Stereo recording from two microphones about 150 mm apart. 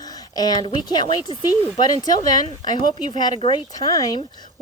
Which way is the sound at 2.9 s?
30° left (ahead or behind).